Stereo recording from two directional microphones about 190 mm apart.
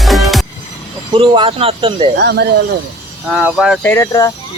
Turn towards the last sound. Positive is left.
turn(degrees=15)  # may be behind; listen again after turning